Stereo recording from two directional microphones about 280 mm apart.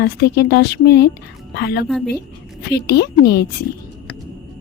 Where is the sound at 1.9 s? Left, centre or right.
Centre.